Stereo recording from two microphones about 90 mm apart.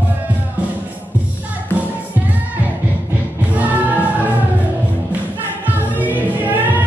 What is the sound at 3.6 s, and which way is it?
Music, 20° right (ahead or behind).